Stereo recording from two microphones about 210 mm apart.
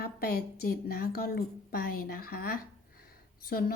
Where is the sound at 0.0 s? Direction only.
45° left (ahead or behind).